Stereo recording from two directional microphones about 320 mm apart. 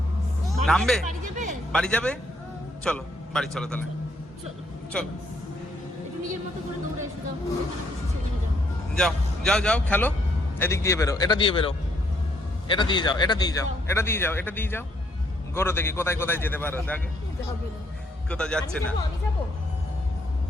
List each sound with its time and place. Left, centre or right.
0.6 s speech: centre
1.2 s a sound: right
1.7 s a man's voice: centre
4.9 s a man's voice: centre
9.0 s a man's voice: centre
18.3 s a man's voice: centre